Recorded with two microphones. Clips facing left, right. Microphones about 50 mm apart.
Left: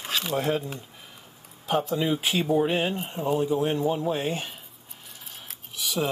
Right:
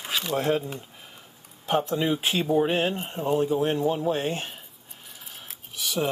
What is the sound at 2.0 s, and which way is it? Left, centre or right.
Speech, centre.